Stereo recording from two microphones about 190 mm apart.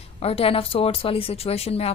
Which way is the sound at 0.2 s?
30° left (ahead or behind).